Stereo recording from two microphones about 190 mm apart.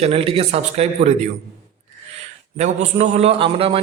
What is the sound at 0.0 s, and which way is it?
A man's voice, 30° right (ahead or behind).